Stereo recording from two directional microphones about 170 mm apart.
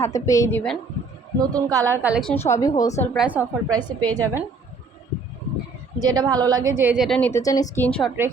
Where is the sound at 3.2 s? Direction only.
10° right (ahead or behind).